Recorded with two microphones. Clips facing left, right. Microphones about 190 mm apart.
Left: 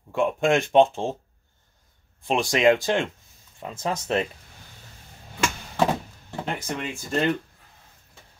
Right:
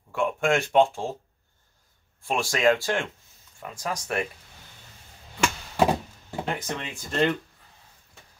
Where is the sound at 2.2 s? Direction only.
20° left (ahead or behind).